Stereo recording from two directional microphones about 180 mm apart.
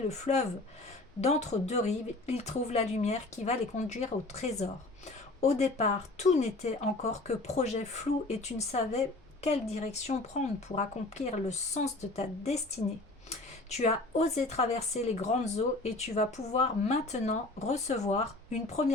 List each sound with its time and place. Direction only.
0.1 s speech: 40° left (ahead or behind)
13.7 s speech: 35° left (ahead or behind)